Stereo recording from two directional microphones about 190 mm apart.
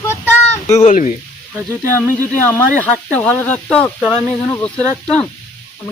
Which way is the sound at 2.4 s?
10° left (ahead or behind).